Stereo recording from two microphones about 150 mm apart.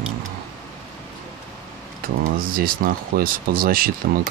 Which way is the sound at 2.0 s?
70° right (ahead or behind).